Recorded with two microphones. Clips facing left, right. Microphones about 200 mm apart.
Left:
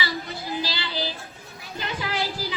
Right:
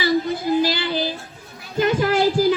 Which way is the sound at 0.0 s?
50° right (ahead or behind).